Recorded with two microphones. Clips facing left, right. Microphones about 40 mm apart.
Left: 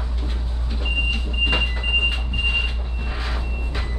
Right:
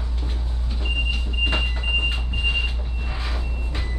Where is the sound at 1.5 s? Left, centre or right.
Centre.